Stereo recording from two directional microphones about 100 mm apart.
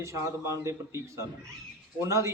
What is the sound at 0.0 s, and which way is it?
A man's voice, 30° right (ahead or behind).